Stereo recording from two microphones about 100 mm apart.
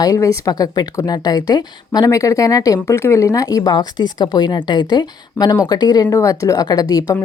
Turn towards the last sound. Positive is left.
turn(degrees=40)  # may be behind; listen again after turning